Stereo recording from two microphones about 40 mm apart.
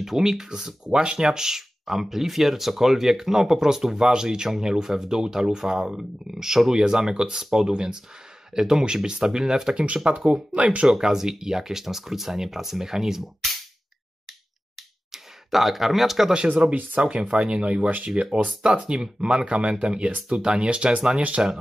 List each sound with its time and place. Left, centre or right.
0.0 s speech: centre
10.0 s speech: right
10.9 s speech: centre
15.0 s speech: centre
16.6 s speech: right
17.8 s speech: right
18.1 s speech: right
19.4 s speech: right